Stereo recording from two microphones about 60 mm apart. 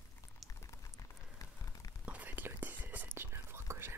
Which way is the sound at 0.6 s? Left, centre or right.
Left.